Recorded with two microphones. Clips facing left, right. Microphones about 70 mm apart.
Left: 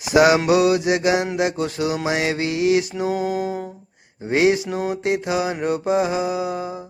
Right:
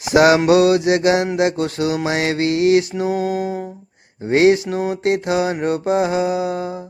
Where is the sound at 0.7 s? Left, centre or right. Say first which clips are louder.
Right 4 dB; centre.